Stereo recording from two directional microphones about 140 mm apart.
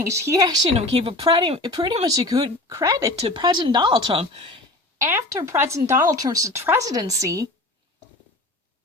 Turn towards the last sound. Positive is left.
turn(degrees=-25)  # may be behind; listen again after turning